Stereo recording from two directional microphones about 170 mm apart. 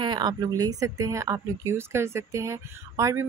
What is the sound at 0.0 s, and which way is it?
A woman's voice, 25° right (ahead or behind).